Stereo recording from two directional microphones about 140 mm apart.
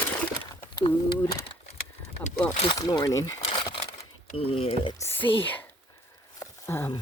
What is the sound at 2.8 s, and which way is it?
Speech, 25° left (ahead or behind).